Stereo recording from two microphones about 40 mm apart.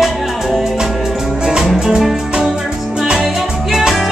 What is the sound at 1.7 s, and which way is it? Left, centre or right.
Music, centre.